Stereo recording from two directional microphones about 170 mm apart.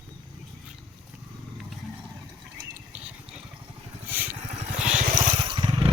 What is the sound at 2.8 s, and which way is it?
Vehicle, 5° right (ahead or behind).